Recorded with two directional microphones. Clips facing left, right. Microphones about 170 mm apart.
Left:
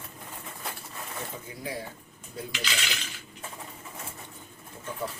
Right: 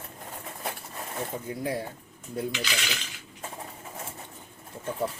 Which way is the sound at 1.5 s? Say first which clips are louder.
Right 8 dB; 55° right (ahead or behind).